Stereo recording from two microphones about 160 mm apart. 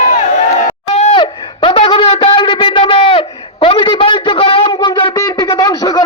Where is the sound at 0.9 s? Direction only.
40° left (ahead or behind).